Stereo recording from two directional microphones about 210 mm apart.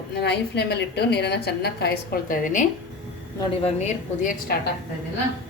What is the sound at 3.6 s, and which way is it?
Speech, 35° left (ahead or behind).